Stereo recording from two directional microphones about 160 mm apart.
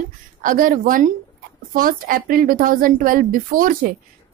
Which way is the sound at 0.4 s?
60° right (ahead or behind).